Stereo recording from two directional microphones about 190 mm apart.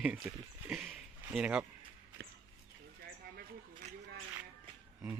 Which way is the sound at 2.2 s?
60° right (ahead or behind).